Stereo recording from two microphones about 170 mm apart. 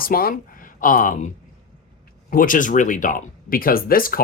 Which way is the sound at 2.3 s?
55° left (ahead or behind).